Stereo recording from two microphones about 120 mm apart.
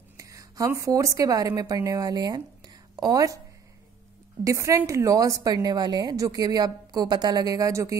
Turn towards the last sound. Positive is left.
turn(degrees=-25)  # may be behind; listen again after turning